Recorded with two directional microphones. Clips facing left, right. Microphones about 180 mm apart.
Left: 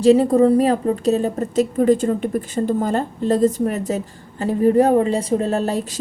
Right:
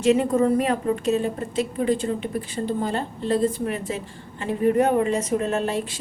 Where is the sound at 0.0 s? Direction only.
35° left (ahead or behind).